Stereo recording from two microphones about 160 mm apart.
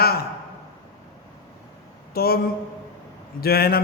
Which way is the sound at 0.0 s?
75° left (ahead or behind).